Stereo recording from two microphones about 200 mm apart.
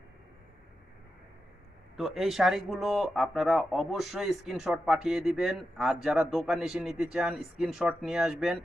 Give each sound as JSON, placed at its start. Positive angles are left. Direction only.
{"t": 2.0, "sound": "speech", "side_deg": 0}